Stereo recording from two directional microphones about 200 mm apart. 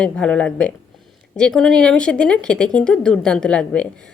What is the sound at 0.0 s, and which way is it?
Speech, 5° left (ahead or behind).